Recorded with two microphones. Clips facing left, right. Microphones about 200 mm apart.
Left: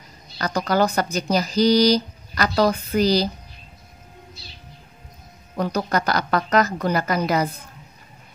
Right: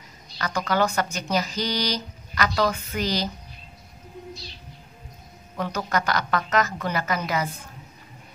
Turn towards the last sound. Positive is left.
turn(degrees=40)  # may be behind; listen again after turning